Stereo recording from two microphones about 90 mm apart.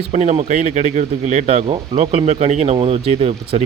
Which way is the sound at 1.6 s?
90° right.